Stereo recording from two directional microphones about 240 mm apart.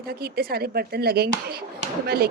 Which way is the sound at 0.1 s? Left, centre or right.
Right.